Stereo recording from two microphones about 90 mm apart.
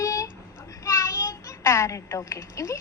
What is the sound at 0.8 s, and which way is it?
Child singing, 35° left (ahead or behind).